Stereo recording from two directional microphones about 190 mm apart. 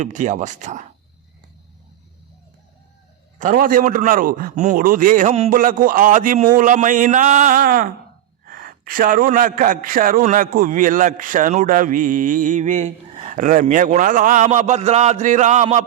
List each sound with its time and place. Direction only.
0.0 s speech: 40° right (ahead or behind)
3.3 s a man's voice: 45° right (ahead or behind)